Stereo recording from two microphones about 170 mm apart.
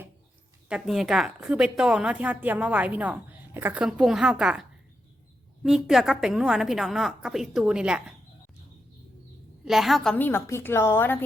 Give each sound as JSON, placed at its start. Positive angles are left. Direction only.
{"t": 0.7, "sound": "a woman's voice", "side_deg": 0}
{"t": 5.6, "sound": "a woman's voice", "side_deg": -5}
{"t": 9.6, "sound": "a woman's voice", "side_deg": 0}